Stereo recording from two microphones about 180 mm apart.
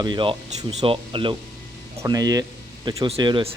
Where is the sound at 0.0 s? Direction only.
25° right (ahead or behind).